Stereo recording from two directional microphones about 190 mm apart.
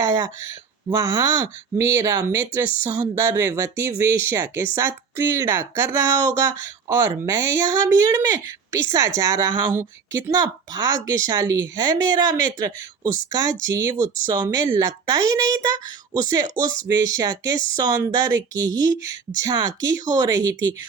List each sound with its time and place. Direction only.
0.0 s speech: 15° right (ahead or behind)